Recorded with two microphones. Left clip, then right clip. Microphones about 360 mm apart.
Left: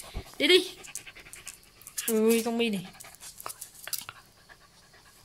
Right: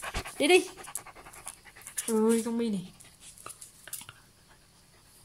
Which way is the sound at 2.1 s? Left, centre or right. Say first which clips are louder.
Left 2 dB; centre.